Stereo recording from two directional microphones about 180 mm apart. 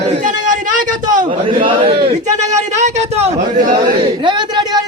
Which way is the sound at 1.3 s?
30° right (ahead or behind).